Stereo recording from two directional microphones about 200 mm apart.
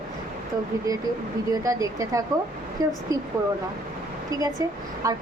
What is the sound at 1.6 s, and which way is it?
Speech, 15° right (ahead or behind).